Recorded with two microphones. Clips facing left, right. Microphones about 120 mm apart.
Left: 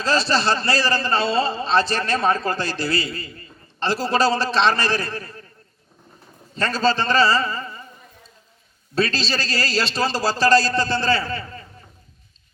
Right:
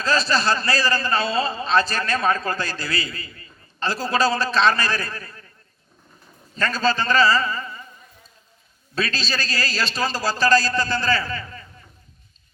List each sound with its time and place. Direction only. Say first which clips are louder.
0.0 s a man's voice: left 1 dB; 30° left (ahead or behind)
6.6 s a man's voice: left 2 dB; 30° left (ahead or behind)
9.0 s speech: left 4 dB; 30° left (ahead or behind)